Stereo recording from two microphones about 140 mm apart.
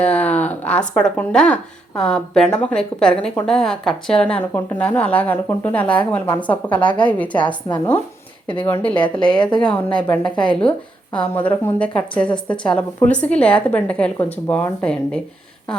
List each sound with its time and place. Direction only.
0.0 s a woman's voice: 10° left (ahead or behind)
6.8 s a woman's voice: 35° left (ahead or behind)
8.6 s a woman's voice: 15° left (ahead or behind)
8.9 s a woman's voice: 35° left (ahead or behind)
9.6 s a woman's voice: 10° left (ahead or behind)
10.2 s a woman's voice: 30° left (ahead or behind)
10.5 s a woman's voice: 5° left (ahead or behind)